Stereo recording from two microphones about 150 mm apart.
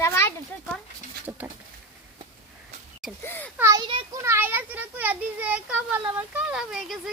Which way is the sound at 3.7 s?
30° right (ahead or behind).